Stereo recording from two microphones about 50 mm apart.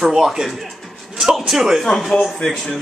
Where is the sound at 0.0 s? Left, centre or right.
Centre.